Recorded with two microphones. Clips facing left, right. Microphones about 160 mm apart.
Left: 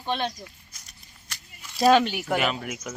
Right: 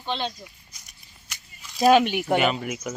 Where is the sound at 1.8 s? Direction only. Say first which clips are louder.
Right 1 dB; 15° right (ahead or behind).